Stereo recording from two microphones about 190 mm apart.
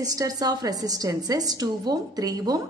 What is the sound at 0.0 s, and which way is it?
A woman's voice, 20° right (ahead or behind).